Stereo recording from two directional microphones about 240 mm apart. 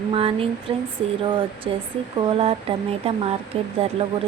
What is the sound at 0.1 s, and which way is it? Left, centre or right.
Speech, right.